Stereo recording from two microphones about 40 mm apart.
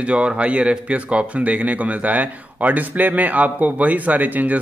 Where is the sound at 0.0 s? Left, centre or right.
Right.